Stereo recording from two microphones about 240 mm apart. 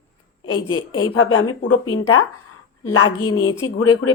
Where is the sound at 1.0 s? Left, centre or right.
Left.